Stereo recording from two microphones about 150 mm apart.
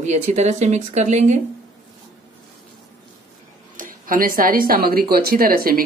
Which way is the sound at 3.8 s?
65° right (ahead or behind).